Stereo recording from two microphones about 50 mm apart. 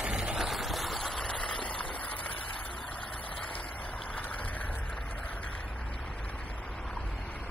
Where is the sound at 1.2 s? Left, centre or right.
Centre.